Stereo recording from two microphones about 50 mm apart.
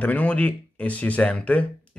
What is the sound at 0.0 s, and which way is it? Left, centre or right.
Speech, left.